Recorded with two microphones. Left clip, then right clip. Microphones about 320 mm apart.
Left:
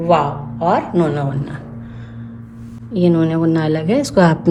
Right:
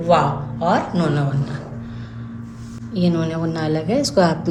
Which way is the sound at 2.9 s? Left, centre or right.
Left.